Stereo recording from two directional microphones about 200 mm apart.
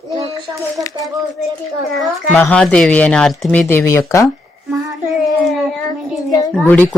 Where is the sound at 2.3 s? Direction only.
5° left (ahead or behind).